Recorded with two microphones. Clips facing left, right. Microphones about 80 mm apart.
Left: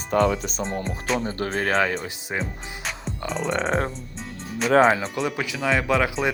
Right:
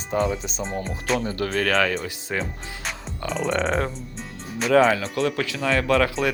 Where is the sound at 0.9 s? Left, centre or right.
Centre.